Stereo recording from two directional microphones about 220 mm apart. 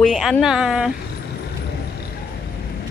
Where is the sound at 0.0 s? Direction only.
Centre (ahead or behind).